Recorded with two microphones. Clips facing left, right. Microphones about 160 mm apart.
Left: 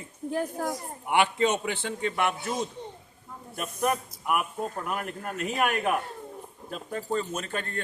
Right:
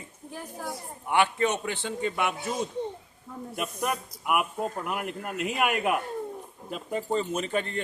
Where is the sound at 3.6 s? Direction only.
5° right (ahead or behind).